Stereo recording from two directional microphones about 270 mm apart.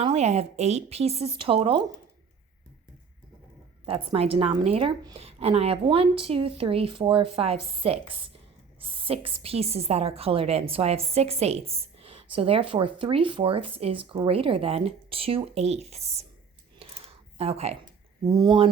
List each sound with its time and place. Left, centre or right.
0.0 s a woman's voice: right
3.8 s a woman's voice: right
16.8 s a sound: right
17.3 s a woman's voice: right